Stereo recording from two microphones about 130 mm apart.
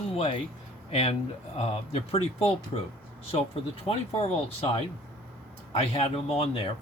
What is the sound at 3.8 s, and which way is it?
Speech, 45° left (ahead or behind).